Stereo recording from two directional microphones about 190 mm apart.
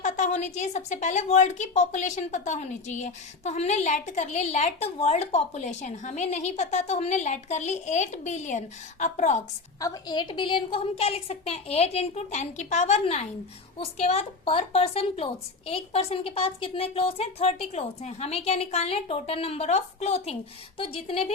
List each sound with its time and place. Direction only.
0.0 s a woman's voice: 40° left (ahead or behind)
9.8 s a woman's voice: 20° left (ahead or behind)